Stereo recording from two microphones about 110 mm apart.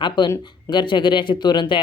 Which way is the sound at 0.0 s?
45° left (ahead or behind).